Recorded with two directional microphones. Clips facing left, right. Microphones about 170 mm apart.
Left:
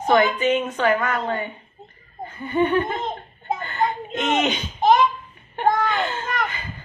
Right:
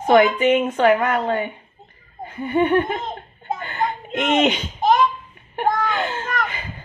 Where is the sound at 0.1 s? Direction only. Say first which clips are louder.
Right 4 dB; 15° right (ahead or behind).